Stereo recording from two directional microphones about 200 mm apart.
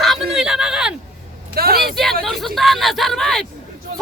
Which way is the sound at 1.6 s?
50° right (ahead or behind).